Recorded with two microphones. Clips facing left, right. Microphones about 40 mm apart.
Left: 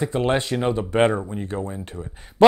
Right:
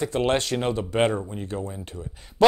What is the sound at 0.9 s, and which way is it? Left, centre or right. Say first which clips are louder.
Speech: left 4 dB; left.